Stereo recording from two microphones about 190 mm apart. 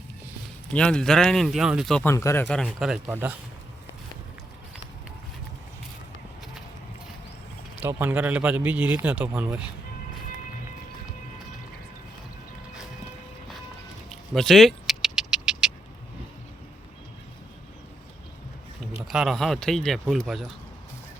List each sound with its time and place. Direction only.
0.7 s speech: 5° left (ahead or behind)
2.1 s speech: 15° left (ahead or behind)
2.5 s speech: centre (ahead or behind)
7.8 s a man's voice: 10° right (ahead or behind)
14.3 s vehicle: centre (ahead or behind)
19.0 s speech: centre (ahead or behind)